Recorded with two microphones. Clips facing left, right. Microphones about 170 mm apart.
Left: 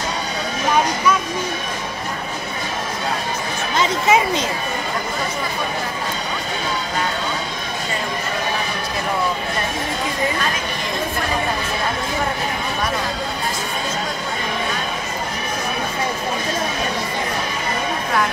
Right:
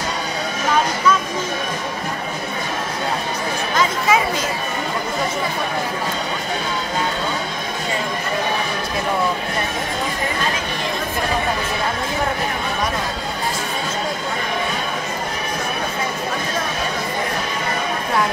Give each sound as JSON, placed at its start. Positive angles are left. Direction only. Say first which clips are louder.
{"t": 3.7, "sound": "speech", "louder": "left 2 dB", "side_deg": 25}